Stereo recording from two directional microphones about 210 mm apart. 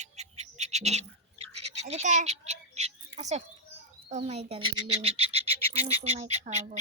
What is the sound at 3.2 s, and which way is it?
Speech, 35° right (ahead or behind).